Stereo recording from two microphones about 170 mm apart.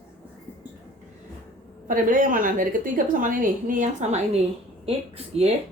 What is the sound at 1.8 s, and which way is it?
A woman's voice, 50° right (ahead or behind).